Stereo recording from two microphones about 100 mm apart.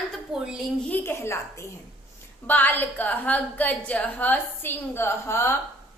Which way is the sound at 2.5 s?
20° left (ahead or behind).